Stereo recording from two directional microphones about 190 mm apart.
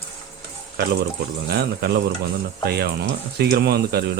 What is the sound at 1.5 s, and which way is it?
Speech, 55° right (ahead or behind).